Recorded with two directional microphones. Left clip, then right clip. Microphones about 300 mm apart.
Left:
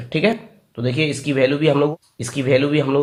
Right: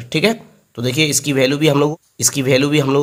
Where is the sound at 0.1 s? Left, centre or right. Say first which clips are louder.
Right 2 dB; right.